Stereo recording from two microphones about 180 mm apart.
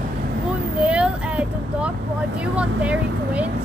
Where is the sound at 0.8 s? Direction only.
5° right (ahead or behind).